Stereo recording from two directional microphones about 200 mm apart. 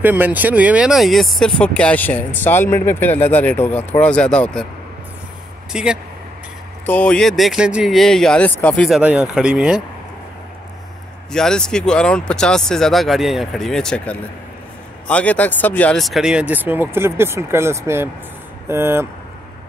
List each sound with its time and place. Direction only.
0.0 s speech: 10° right (ahead or behind)
5.7 s speech: 5° right (ahead or behind)
11.3 s speech: 5° left (ahead or behind)